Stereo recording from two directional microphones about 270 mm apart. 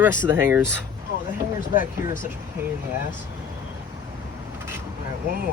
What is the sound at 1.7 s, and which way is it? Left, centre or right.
Speech, left.